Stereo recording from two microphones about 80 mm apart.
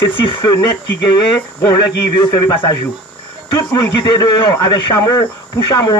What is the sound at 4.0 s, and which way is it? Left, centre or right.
A man's voice, left.